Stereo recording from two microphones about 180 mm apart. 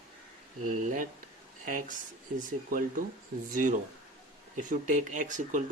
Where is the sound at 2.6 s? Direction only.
50° right (ahead or behind).